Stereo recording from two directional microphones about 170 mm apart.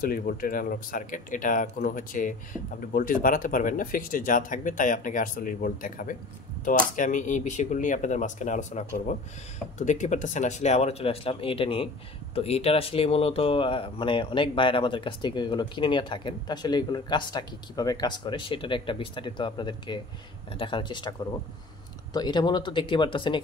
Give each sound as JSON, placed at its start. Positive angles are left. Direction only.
{"t": 0.0, "sound": "speech", "side_deg": 60}
{"t": 22.1, "sound": "speech", "side_deg": 25}